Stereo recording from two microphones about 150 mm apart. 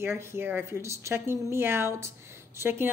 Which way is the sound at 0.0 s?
15° right (ahead or behind).